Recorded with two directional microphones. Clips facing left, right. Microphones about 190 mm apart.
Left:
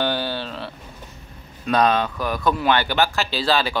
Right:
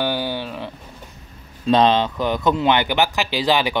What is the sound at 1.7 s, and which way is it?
Speech, 25° right (ahead or behind).